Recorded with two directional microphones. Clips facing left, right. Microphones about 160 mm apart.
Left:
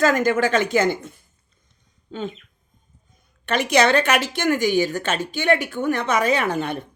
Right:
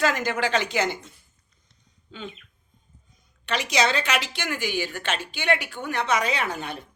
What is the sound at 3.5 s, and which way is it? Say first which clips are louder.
A woman's voice: left 6 dB; 55° left (ahead or behind).